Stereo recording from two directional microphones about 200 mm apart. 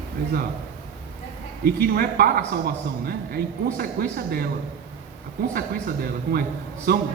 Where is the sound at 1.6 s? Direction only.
50° right (ahead or behind).